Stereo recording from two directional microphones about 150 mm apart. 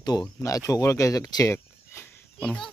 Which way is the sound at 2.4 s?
5° left (ahead or behind).